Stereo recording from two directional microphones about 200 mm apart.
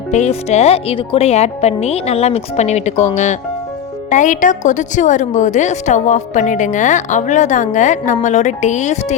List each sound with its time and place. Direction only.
0.1 s a woman's voice: 35° left (ahead or behind)
4.1 s a woman's voice: 40° left (ahead or behind)